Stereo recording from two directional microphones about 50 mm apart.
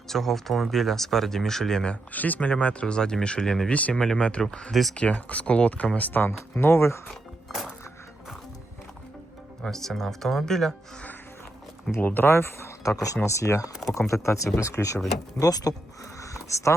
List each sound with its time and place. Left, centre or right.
0.1 s speech: centre
2.1 s speech: left; by 3.7 s centre
3.7 s speech: left
3.9 s speech: centre
4.7 s speech: centre
4.9 s speech: left
6.0 s speech: left
6.6 s speech: left
7.4 s music: centre
9.6 s speech: centre
11.9 s speech: left
12.3 s speech: left
13.2 s speech: left
16.2 s a sound: left